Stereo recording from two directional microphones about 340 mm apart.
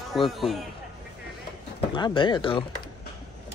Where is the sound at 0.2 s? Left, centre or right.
Centre.